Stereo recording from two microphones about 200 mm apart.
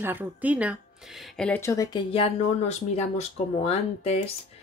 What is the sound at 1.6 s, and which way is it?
Speech, 15° left (ahead or behind).